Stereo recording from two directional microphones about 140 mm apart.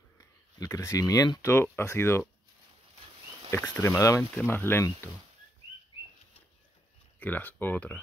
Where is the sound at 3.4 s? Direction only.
20° left (ahead or behind).